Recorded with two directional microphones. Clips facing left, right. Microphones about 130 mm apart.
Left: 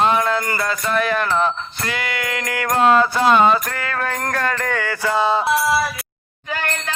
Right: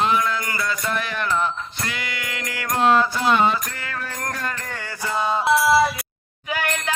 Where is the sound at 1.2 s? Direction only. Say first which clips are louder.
Left 4 dB; 90° left.